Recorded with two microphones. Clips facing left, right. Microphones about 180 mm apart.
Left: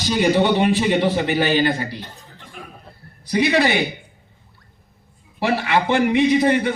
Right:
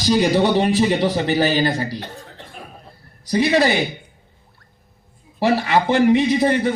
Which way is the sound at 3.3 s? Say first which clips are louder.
Right 1 dB; 35° right (ahead or behind).